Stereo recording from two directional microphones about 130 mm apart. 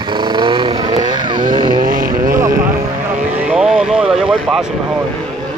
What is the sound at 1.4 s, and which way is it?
Vehicle, 90° right.